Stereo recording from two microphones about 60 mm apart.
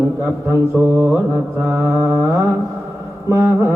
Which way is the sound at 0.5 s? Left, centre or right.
Right.